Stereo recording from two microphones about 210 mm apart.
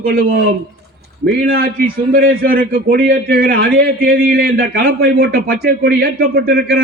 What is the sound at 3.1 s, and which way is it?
Speech, 65° right (ahead or behind).